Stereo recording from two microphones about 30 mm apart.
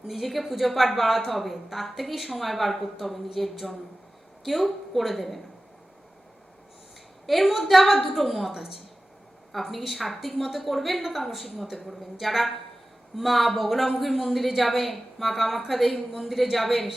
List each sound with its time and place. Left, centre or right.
0.1 s speech: centre
7.3 s speech: centre
9.7 s speech: centre